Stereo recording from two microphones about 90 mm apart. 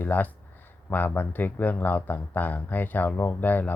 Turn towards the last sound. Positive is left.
turn(degrees=20)  # may be behind; listen again after turning